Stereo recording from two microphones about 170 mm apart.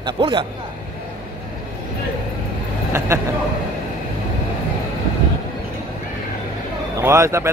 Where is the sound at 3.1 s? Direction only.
15° right (ahead or behind).